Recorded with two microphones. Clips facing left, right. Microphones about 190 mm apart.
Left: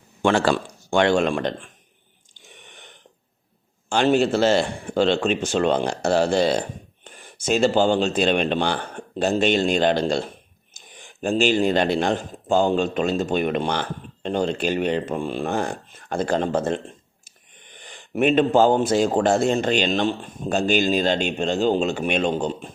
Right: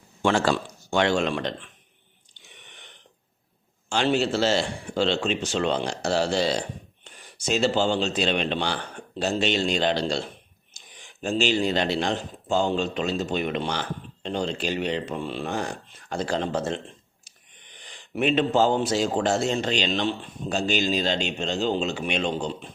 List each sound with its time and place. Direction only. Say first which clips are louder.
0.2 s a man's voice: left 3 dB; 60° left (ahead or behind)
2.5 s a sound: left 4 dB; 45° left (ahead or behind)
3.8 s a man's voice: left 5 dB; 50° left (ahead or behind)